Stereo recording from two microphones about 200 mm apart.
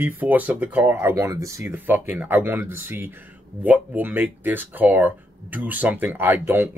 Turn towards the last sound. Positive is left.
turn(degrees=-10)  # may be behind; listen again after turning